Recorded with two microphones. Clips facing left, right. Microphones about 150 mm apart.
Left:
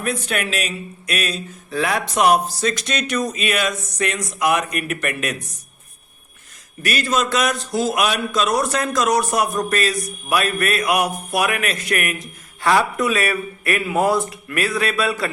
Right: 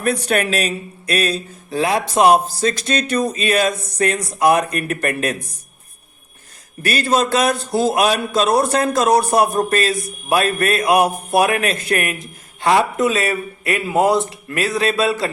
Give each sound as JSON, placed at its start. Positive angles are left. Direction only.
{"t": 0.3, "sound": "speech", "side_deg": -40}
{"t": 6.8, "sound": "a man's voice", "side_deg": -30}